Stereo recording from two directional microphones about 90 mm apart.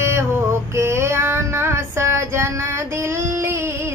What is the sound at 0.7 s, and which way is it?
Female singing, 30° right (ahead or behind).